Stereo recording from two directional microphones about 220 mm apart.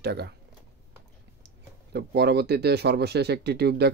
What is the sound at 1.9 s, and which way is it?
Speech, 50° right (ahead or behind).